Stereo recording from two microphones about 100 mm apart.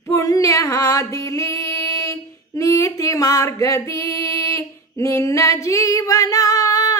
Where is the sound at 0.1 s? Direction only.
30° left (ahead or behind).